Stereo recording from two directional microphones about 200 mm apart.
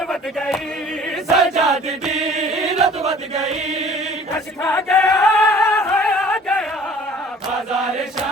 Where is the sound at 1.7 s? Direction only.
Centre (ahead or behind).